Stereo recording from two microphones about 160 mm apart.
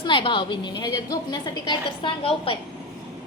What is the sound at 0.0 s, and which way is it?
A woman's voice, 30° left (ahead or behind).